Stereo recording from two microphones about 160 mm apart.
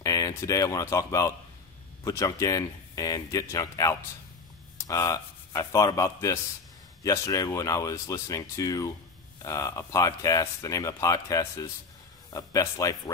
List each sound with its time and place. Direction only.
0.0 s speech: 20° left (ahead or behind)